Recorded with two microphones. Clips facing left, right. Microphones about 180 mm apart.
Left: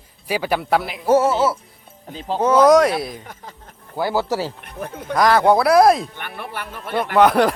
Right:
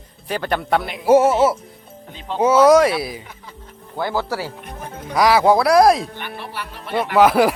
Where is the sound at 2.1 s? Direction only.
40° left (ahead or behind).